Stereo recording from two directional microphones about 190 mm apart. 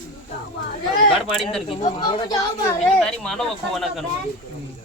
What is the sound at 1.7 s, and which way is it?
Speech, 25° left (ahead or behind).